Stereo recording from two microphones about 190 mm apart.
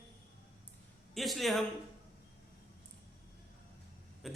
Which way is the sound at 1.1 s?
Centre (ahead or behind).